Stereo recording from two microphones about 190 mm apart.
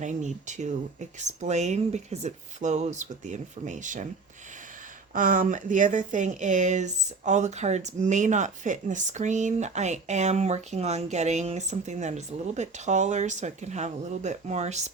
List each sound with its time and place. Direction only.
0.0 s speech: 40° right (ahead or behind)
5.1 s speech: 45° right (ahead or behind)